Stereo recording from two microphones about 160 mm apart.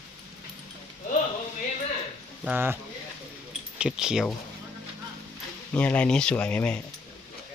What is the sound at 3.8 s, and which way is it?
Speech, 5° right (ahead or behind).